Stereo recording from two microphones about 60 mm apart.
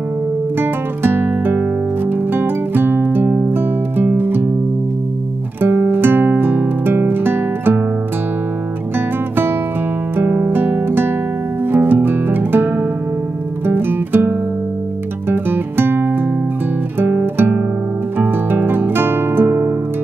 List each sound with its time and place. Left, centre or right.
0.6 s music: right
5.6 s music: right
10.1 s music: right
15.2 s guitar: right
17.0 s music: right